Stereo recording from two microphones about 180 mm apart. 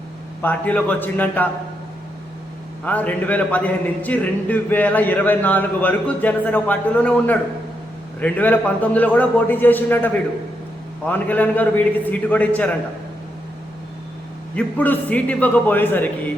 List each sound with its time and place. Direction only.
0.4 s a man's voice: 10° left (ahead or behind)
2.8 s a man's voice: 10° left (ahead or behind)
14.5 s a man's voice: 10° left (ahead or behind)